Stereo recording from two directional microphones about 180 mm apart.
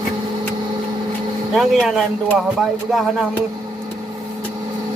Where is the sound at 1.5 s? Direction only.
Centre (ahead or behind).